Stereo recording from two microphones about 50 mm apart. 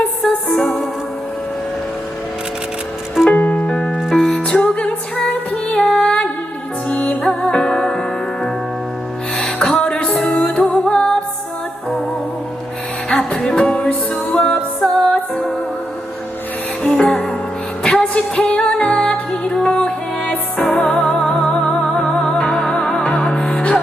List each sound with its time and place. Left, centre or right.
0.2 s music: centre
3.3 s music: left
3.7 s music: left
4.1 s music: centre
4.4 s music: left
5.8 s music: centre
9.6 s music: centre
13.3 s music: centre
16.8 s music: centre